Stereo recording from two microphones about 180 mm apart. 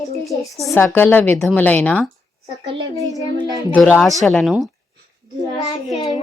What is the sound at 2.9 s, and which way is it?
Speech, 20° right (ahead or behind).